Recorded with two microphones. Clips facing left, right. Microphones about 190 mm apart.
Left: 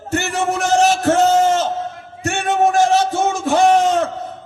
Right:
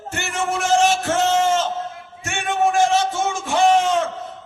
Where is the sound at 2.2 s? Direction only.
40° left (ahead or behind).